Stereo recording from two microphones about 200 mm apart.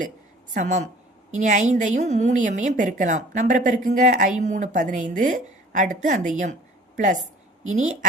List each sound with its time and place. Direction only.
0.5 s a woman's voice: 35° right (ahead or behind)